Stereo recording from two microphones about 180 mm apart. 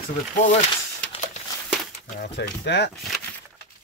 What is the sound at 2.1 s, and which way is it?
Speech, 55° left (ahead or behind).